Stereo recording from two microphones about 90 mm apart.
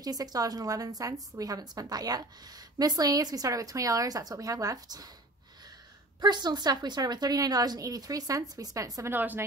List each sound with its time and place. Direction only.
0.0 s a woman's voice: 45° right (ahead or behind)
6.2 s a woman's voice: 50° right (ahead or behind)
9.0 s a woman's voice: 20° right (ahead or behind)